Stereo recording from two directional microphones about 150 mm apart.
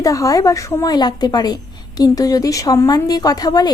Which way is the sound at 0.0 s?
20° left (ahead or behind).